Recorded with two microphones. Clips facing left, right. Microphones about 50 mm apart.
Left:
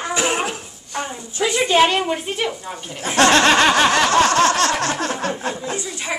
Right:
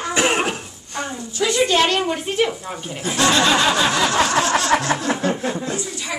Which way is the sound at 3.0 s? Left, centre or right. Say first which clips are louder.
Left 3 dB; left.